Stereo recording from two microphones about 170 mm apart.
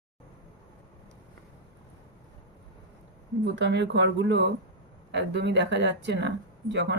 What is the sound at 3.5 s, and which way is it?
Speech, 90° right.